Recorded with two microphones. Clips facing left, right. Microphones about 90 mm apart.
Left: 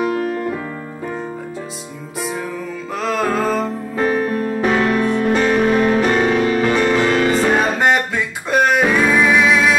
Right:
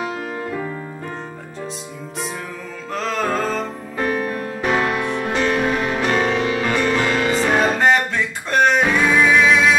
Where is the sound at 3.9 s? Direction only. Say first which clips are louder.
Left 4 dB; 30° left (ahead or behind).